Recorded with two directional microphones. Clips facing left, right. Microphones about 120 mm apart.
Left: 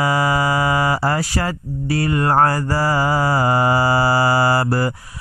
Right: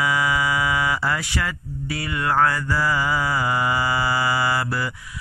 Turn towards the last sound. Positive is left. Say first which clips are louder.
# left 6 dB
turn(degrees=40)  # may be behind; listen again after turning